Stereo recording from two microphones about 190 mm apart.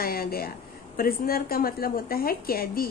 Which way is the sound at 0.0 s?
50° left (ahead or behind).